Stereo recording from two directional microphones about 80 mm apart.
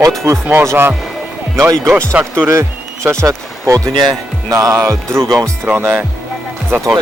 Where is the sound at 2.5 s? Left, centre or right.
Right.